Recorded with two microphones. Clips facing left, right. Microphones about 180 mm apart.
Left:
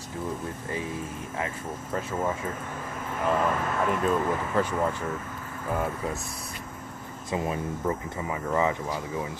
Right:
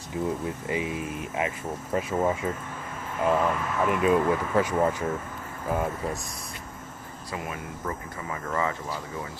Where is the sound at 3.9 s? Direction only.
10° right (ahead or behind).